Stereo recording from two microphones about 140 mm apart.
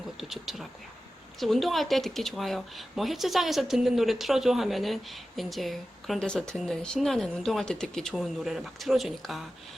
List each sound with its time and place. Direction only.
0.2 s speech: centre (ahead or behind)